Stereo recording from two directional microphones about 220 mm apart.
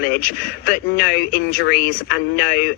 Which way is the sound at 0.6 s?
40° left (ahead or behind).